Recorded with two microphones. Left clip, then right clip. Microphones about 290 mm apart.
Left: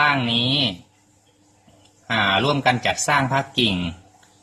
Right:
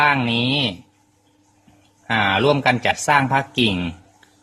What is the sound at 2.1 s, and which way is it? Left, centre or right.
Speech, right.